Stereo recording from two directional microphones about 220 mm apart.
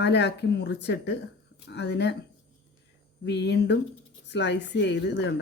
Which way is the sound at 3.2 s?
50° left (ahead or behind).